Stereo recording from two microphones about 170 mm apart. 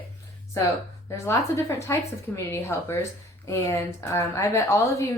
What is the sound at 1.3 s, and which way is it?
Speech, 15° left (ahead or behind).